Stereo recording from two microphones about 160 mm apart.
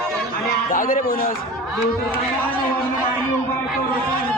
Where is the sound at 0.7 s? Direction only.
60° left (ahead or behind).